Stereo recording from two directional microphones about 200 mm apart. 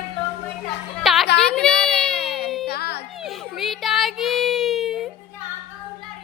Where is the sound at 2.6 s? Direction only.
50° left (ahead or behind).